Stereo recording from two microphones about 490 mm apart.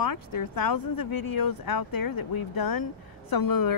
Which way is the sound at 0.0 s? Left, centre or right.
Left.